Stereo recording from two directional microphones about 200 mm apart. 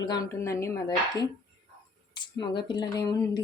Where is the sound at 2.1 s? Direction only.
20° left (ahead or behind).